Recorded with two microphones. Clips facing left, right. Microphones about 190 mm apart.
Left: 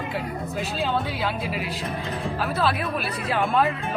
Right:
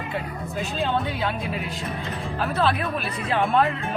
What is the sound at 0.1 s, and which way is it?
Speech, centre (ahead or behind).